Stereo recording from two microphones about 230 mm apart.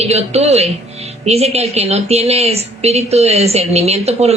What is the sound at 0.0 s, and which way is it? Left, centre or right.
A woman's voice, right.